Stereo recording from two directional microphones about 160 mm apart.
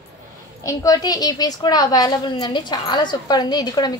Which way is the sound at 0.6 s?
20° left (ahead or behind).